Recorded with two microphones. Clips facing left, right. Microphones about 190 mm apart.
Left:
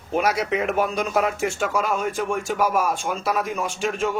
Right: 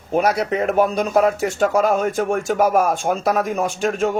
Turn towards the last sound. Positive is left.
turn(degrees=-45)  # may be behind; listen again after turning